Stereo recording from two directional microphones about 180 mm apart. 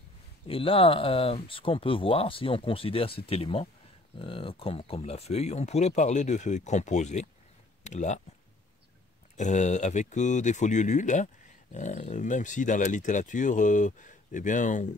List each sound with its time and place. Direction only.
0.5 s speech: 30° left (ahead or behind)
9.4 s speech: 40° left (ahead or behind)